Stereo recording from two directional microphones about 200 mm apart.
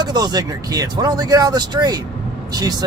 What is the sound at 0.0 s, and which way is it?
Speech, 20° right (ahead or behind).